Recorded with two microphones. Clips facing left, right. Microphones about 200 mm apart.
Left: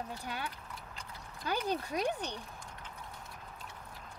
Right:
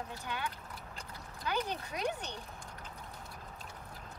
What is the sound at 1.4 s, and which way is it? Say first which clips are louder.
Speech: left 2 dB; 35° left (ahead or behind).